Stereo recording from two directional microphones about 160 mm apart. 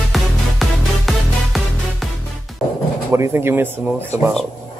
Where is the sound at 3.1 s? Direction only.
15° right (ahead or behind).